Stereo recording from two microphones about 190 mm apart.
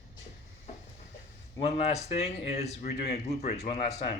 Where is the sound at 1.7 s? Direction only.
35° left (ahead or behind).